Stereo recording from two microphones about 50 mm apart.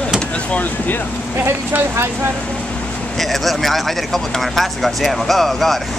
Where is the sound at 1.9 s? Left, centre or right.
Right.